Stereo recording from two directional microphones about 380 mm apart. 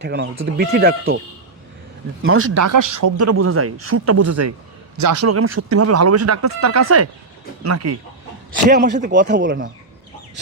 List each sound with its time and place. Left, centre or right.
0.0 s speech: right
2.2 s speech: right
2.6 s speech: right
3.2 s speech: right
8.7 s speech: centre